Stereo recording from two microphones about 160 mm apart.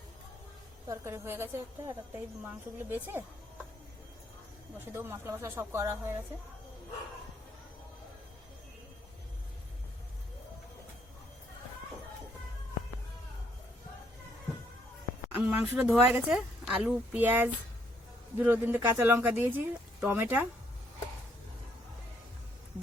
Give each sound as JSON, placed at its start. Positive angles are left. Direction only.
{"t": 0.9, "sound": "a woman's voice", "side_deg": -15}
{"t": 4.9, "sound": "a woman's voice", "side_deg": -15}
{"t": 15.3, "sound": "a woman's voice", "side_deg": -10}